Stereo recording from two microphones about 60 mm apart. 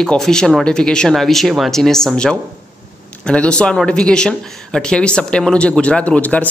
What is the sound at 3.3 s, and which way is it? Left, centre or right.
Speech, centre.